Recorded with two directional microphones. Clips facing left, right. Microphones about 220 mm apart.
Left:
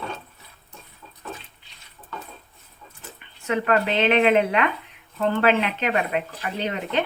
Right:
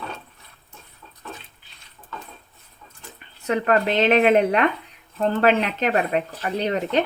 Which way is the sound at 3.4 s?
40° right (ahead or behind).